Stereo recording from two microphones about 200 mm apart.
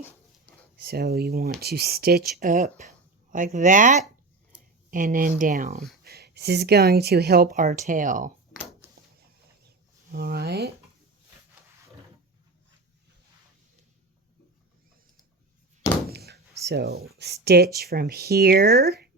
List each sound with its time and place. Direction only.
0.8 s speech: 50° right (ahead or behind)
6.1 s speech: 55° right (ahead or behind)
10.1 s speech: 50° right (ahead or behind)
16.0 s a sound: 55° right (ahead or behind)
17.7 s speech: 50° right (ahead or behind)